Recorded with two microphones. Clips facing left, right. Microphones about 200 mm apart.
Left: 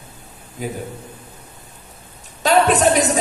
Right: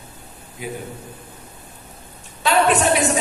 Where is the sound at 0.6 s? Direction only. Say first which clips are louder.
Left 3 dB; 40° left (ahead or behind).